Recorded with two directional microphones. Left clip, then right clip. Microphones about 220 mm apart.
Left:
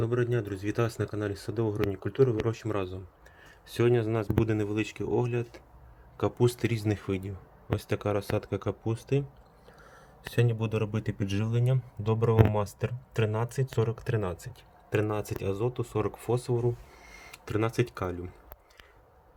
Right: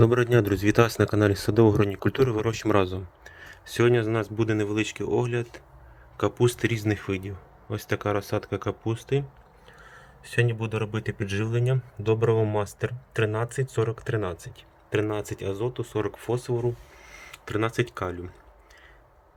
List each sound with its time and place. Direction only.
0.0 s speech: 35° right (ahead or behind); by 9.2 s centre (ahead or behind)
10.4 s speech: centre (ahead or behind)